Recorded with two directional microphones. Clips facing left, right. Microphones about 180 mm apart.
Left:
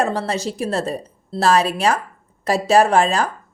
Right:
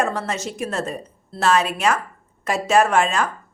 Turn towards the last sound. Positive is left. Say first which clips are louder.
# left 3 dB
turn(degrees=35)  # may be behind; listen again after turning